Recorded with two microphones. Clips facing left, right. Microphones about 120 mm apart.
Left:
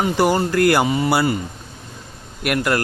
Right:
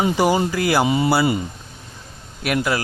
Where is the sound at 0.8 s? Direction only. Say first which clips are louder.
Right 1 dB; 20° right (ahead or behind).